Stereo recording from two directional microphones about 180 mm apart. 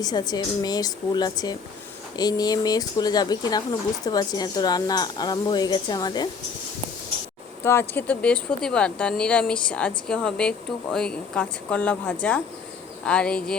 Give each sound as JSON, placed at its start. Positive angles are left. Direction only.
{"t": 0.0, "sound": "speech", "side_deg": 20}
{"t": 7.6, "sound": "speech", "side_deg": 15}